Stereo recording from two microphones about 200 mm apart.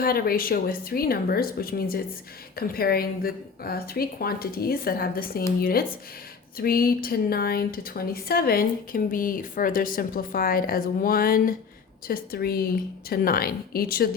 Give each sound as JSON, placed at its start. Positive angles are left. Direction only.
{"t": 0.0, "sound": "a woman's voice", "side_deg": 50}